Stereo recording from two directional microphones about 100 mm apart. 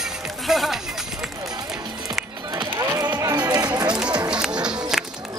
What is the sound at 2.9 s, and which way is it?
Music, 35° right (ahead or behind).